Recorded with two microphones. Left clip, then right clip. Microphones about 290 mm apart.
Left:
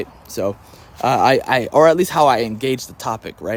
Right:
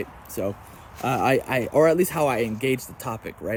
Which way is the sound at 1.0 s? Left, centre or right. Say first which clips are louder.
Left 8 dB; centre.